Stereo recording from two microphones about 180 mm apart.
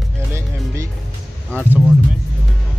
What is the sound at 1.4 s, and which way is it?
Speech, 10° left (ahead or behind).